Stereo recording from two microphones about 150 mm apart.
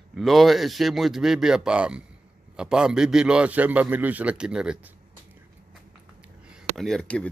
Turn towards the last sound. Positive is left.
turn(degrees=5)  # may be behind; listen again after turning